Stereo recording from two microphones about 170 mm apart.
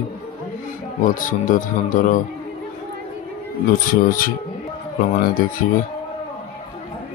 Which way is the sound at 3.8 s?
55° left (ahead or behind).